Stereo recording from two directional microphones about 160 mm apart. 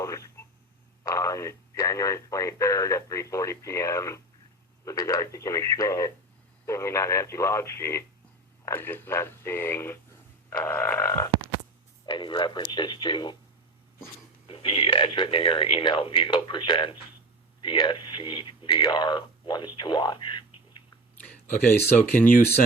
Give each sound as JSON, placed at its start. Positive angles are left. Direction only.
{"t": 0.0, "sound": "a sound", "side_deg": 20}
{"t": 1.0, "sound": "speech", "side_deg": 20}
{"t": 12.0, "sound": "speech", "side_deg": 30}
{"t": 14.4, "sound": "speech", "side_deg": 35}